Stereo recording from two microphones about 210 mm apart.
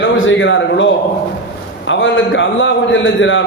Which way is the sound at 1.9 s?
65° left (ahead or behind).